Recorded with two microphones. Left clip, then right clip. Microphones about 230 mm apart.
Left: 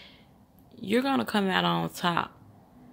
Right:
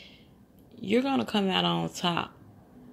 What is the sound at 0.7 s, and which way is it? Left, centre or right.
Speech, centre.